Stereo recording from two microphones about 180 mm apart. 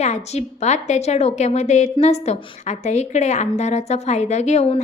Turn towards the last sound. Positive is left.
turn(degrees=40)  # may be behind; listen again after turning